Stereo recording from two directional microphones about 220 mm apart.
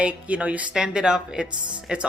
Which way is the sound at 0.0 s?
5° right (ahead or behind).